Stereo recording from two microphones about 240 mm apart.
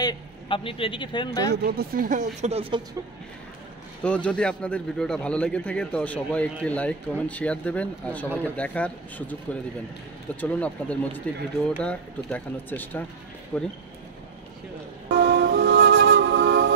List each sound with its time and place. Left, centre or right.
0.0 s a man's voice: left
1.5 s speech: right
4.0 s speech: centre
15.0 s music: right